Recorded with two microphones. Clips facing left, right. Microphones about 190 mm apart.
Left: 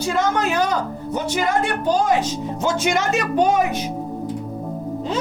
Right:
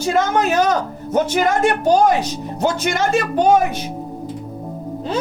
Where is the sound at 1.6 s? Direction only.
70° right (ahead or behind).